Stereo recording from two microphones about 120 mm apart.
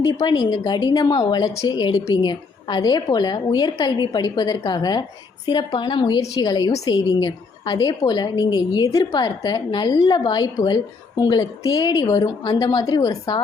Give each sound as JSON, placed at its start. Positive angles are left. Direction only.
{"t": 0.0, "sound": "speech", "side_deg": 40}